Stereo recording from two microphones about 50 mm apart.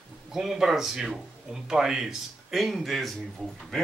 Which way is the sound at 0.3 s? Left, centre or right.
Centre.